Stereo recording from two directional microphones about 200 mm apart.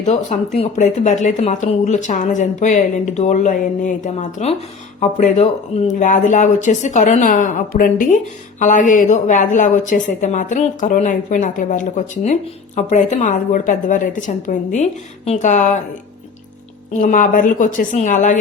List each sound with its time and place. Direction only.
0.0 s speech: 35° left (ahead or behind)
16.9 s speech: 40° left (ahead or behind)